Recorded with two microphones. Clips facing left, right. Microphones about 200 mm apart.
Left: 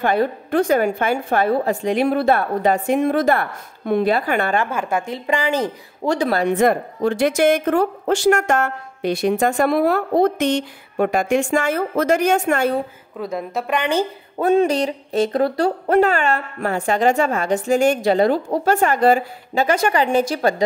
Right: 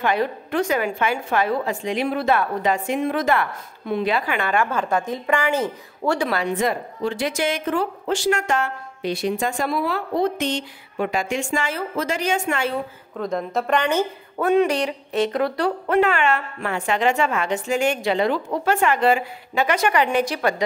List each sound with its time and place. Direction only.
0.0 s a woman's voice: 50° left (ahead or behind)
2.9 s a woman's voice: 45° left (ahead or behind)
4.6 s a woman's voice: 10° left (ahead or behind)
5.3 s speech: 35° left (ahead or behind)
5.6 s speech: 20° left (ahead or behind)
6.2 s speech: 40° left (ahead or behind)
6.5 s a woman's voice: 55° left (ahead or behind)
13.2 s a woman's voice: 5° left (ahead or behind)
13.9 s speech: 35° left (ahead or behind)